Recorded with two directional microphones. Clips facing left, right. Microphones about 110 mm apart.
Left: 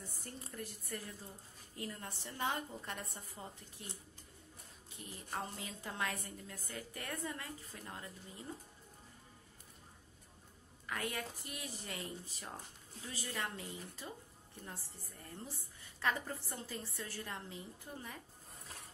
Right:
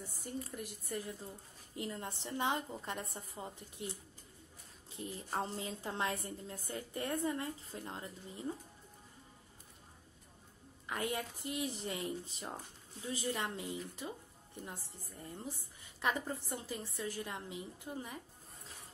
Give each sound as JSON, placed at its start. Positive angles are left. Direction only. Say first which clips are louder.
{"t": 0.3, "sound": "a woman's voice", "louder": "right 5 dB", "side_deg": -15}
{"t": 10.9, "sound": "a woman's voice", "louder": "right 3 dB", "side_deg": -20}